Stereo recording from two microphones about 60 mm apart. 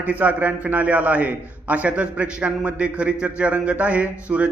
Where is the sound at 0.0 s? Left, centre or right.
Right.